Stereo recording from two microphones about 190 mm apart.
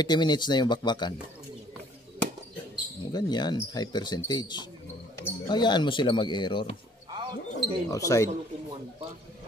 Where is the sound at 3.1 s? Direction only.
20° left (ahead or behind).